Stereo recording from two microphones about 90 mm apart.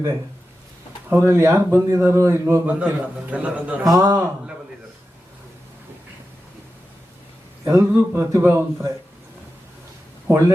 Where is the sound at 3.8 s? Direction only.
45° right (ahead or behind).